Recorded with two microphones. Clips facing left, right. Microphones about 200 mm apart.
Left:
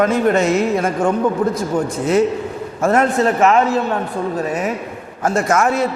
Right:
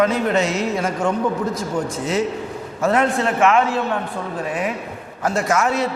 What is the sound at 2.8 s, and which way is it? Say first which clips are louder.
A man's voice: left 3 dB; 45° left (ahead or behind).